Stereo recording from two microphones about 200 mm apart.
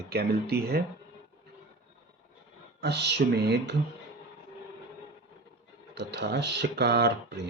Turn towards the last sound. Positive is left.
turn(degrees=-55)  # may be behind; listen again after turning